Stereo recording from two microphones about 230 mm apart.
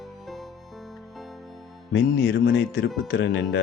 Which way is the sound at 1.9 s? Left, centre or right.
Left.